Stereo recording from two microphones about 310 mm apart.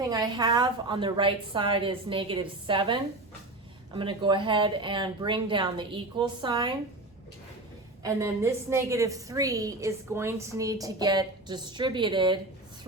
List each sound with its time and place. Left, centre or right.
0.0 s a woman's voice: centre
8.0 s a woman's voice: centre